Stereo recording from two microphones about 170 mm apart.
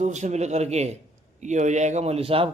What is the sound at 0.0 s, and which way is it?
A man's voice, 45° right (ahead or behind).